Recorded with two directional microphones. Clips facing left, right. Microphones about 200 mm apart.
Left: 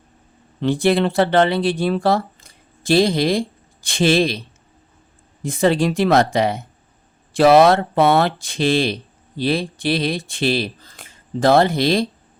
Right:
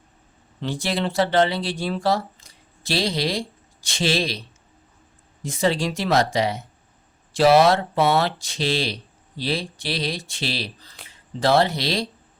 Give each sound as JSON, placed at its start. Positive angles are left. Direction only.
{"t": 0.6, "sound": "speech", "side_deg": 55}